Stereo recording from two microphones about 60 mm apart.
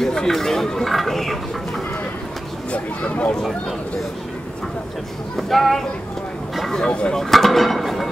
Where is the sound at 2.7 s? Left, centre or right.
Left.